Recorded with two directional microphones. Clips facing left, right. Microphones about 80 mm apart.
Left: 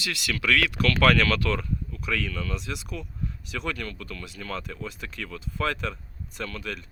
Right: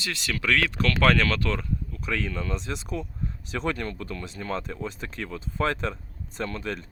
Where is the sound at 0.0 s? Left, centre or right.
Right.